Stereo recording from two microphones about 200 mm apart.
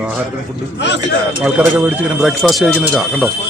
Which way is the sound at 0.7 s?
60° left (ahead or behind).